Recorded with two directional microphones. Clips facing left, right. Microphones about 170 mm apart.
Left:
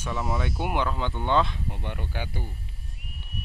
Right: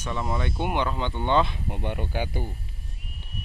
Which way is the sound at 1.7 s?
15° right (ahead or behind).